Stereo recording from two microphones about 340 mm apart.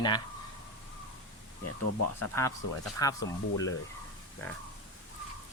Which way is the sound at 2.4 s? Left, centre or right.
Centre.